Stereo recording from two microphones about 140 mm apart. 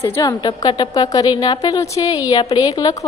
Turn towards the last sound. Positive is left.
turn(degrees=30)  # may be behind; listen again after turning